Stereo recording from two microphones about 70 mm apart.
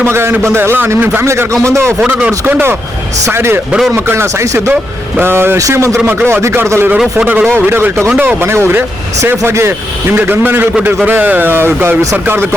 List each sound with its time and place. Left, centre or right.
0.0 s a man's voice: right
2.0 s a man's voice: centre
2.5 s a man's voice: right
3.7 s a man's voice: centre
3.9 s a man's voice: right
5.5 s a man's voice: right
10.2 s a man's voice: right